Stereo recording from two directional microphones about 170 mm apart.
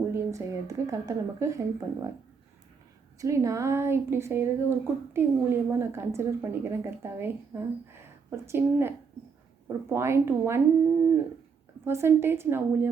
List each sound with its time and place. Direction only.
0.1 s a sound: 15° right (ahead or behind)
0.9 s a woman's voice: 20° right (ahead or behind)
3.2 s speech: 20° right (ahead or behind)
11.9 s speech: 15° right (ahead or behind)